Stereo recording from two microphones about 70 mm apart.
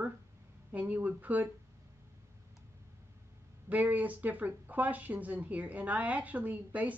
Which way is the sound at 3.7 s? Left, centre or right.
Right.